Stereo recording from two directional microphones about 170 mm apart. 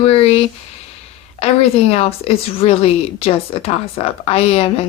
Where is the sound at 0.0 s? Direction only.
35° left (ahead or behind).